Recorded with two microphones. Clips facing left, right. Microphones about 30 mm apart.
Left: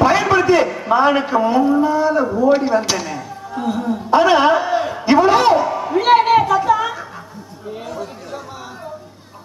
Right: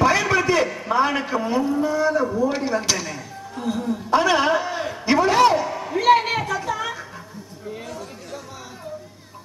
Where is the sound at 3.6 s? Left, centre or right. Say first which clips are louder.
Left 4 dB; left.